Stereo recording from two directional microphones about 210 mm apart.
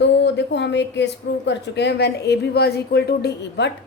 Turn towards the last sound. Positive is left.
turn(degrees=55)  # may be behind; listen again after turning